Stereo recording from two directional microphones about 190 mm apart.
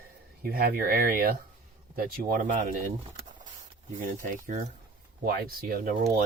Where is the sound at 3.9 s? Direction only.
40° right (ahead or behind).